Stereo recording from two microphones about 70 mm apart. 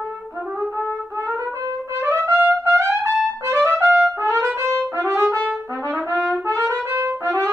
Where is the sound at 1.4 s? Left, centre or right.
Right.